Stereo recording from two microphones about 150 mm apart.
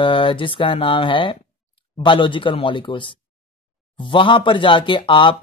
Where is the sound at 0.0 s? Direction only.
35° left (ahead or behind).